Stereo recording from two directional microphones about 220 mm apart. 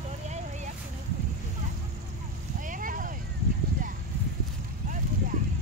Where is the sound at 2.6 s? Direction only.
40° right (ahead or behind).